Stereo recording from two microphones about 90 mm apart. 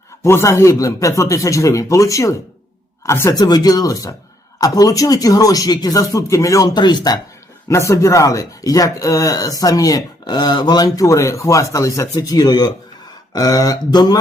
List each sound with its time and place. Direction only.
0.2 s speech: 30° left (ahead or behind)
3.3 s speech: 50° left (ahead or behind)
6.7 s speech: 55° left (ahead or behind)
7.7 s speech: 35° left (ahead or behind)